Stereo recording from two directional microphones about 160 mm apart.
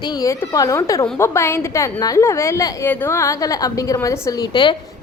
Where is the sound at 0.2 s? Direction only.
20° left (ahead or behind).